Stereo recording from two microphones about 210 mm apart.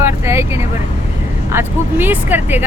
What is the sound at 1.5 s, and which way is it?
Speech, 10° right (ahead or behind).